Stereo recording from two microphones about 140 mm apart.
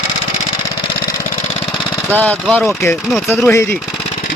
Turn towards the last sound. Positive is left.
turn(degrees=20)  # may be behind; listen again after turning